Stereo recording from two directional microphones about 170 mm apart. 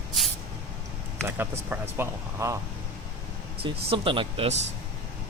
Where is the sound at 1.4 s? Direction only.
15° right (ahead or behind).